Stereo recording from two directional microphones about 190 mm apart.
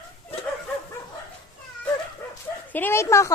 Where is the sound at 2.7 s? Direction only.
10° left (ahead or behind).